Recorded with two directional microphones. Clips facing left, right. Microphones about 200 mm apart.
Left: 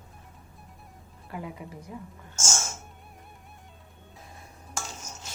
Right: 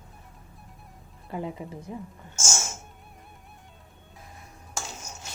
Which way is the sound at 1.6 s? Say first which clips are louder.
Right 4 dB; 30° right (ahead or behind).